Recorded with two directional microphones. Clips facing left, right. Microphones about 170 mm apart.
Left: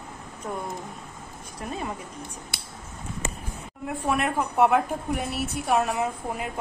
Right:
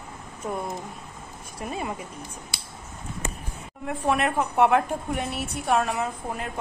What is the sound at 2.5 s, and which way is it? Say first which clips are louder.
Scissors: left 1 dB; 55° left (ahead or behind).